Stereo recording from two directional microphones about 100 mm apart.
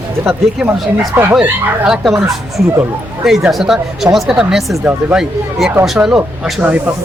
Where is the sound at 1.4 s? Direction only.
5° right (ahead or behind).